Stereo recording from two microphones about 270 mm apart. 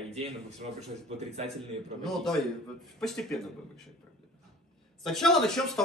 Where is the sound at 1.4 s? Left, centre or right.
Centre.